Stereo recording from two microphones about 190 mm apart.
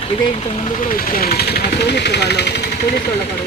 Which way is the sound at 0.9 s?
50° left (ahead or behind).